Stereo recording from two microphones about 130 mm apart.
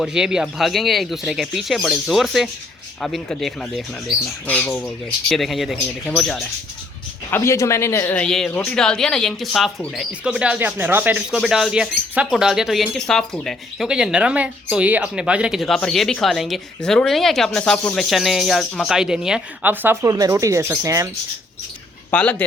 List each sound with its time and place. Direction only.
0.0 s speech: 5° right (ahead or behind)
4.4 s speech: 10° left (ahead or behind)
5.3 s speech: centre (ahead or behind)
7.3 s speech: 20° left (ahead or behind); by 11.2 s 15° right (ahead or behind)
11.3 s speech: centre (ahead or behind)
19.7 s speech: 15° right (ahead or behind)
20.0 s speech: 25° right (ahead or behind)
22.1 s speech: 10° left (ahead or behind)